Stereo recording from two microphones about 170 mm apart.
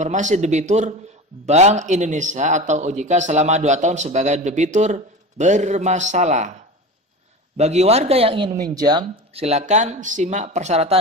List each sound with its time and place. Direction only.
0.0 s a man's voice: 45° right (ahead or behind); by 9.0 s 25° right (ahead or behind)
9.3 s a man's voice: 40° right (ahead or behind)